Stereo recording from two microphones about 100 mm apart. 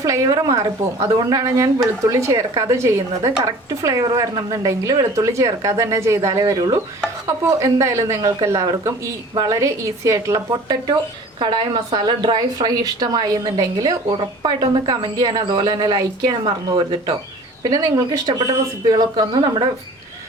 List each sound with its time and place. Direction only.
0.0 s a woman's voice: 35° right (ahead or behind)
6.4 s a woman's voice: 45° right (ahead or behind)
7.3 s a woman's voice: 30° right (ahead or behind)
11.3 s a woman's voice: 55° right (ahead or behind)